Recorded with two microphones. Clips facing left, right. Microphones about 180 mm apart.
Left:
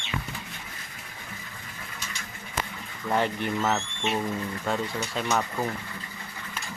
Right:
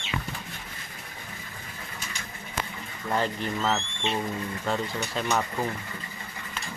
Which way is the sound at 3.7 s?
5° left (ahead or behind).